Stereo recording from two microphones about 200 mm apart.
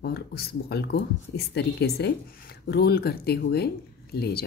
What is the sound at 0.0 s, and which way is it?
Speech, 55° left (ahead or behind).